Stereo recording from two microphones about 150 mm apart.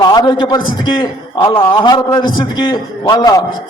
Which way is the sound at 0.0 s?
25° left (ahead or behind).